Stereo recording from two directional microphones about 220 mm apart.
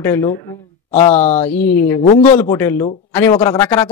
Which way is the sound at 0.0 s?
10° left (ahead or behind).